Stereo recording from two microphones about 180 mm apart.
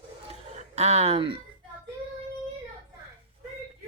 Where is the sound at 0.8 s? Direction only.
35° right (ahead or behind).